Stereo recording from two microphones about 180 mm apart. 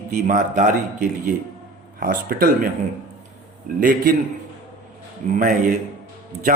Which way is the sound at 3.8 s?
55° right (ahead or behind).